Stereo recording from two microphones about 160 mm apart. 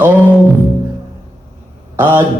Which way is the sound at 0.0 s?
10° right (ahead or behind).